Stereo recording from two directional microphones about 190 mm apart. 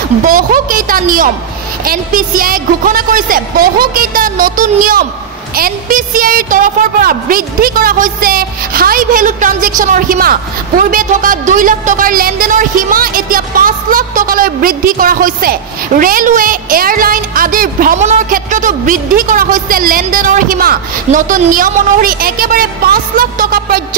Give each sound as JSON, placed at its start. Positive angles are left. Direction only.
{"t": 0.2, "sound": "a woman's voice", "side_deg": -45}